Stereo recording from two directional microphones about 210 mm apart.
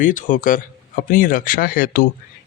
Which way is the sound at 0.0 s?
40° left (ahead or behind).